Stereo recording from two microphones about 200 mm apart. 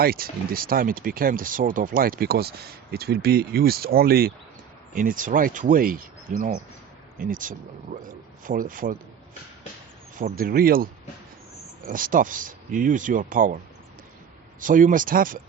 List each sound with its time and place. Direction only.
0.0 s speech: 50° right (ahead or behind)
10.2 s speech: 45° right (ahead or behind)
11.9 s speech: 45° right (ahead or behind)
14.6 s speech: 40° right (ahead or behind)